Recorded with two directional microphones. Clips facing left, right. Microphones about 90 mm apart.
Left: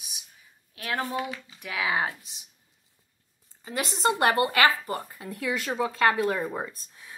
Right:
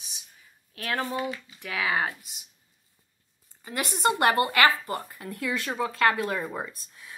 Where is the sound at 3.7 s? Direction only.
20° left (ahead or behind).